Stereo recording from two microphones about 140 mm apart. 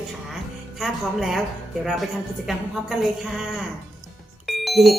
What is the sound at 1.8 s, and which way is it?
A woman's voice, centre (ahead or behind).